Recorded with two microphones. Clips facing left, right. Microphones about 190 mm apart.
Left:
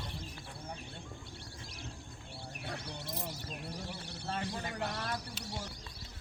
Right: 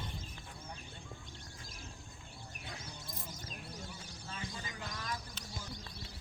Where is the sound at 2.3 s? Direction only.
70° left (ahead or behind).